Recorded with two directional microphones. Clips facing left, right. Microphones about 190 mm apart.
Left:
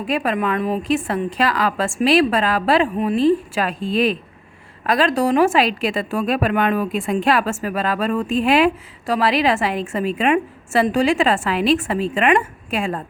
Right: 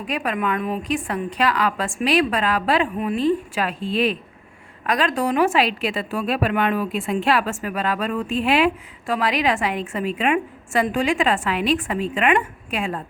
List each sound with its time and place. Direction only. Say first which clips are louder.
0.1 s a woman's voice: left 3 dB; 40° left (ahead or behind)